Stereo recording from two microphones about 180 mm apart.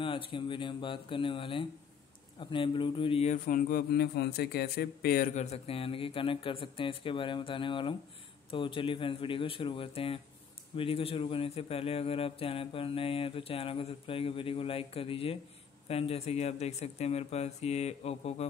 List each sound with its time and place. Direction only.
0.0 s speech: 30° left (ahead or behind)
3.4 s speech: 50° left (ahead or behind)
5.3 s speech: 35° left (ahead or behind)